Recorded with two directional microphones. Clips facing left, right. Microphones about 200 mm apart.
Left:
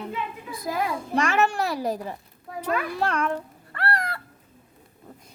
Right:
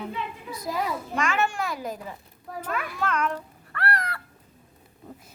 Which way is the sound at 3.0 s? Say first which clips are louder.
Left 2 dB; 35° left (ahead or behind).